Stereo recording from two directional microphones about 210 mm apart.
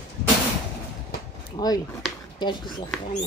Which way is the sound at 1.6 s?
20° left (ahead or behind).